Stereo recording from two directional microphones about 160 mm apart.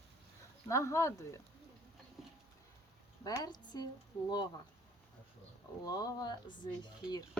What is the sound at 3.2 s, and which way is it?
Speech, 25° left (ahead or behind).